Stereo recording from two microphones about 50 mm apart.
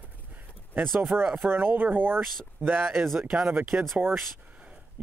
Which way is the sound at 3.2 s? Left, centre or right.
Centre.